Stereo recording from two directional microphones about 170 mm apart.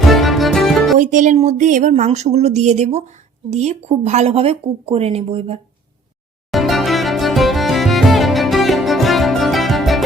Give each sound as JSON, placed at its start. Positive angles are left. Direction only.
{"t": 0.1, "sound": "music", "side_deg": 0}
{"t": 0.9, "sound": "speech", "side_deg": -50}
{"t": 6.5, "sound": "music", "side_deg": 0}